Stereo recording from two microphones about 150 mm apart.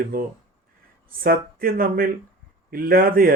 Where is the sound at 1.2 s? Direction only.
80° right.